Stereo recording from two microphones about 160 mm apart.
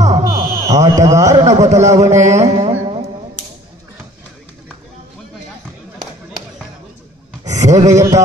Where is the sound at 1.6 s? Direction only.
45° right (ahead or behind).